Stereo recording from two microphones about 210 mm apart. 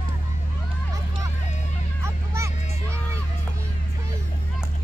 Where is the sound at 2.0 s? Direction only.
15° right (ahead or behind).